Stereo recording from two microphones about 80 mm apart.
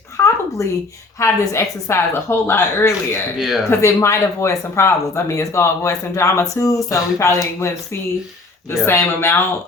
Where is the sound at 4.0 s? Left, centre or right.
Left.